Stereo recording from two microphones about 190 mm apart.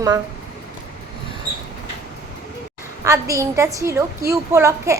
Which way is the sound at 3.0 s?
15° right (ahead or behind).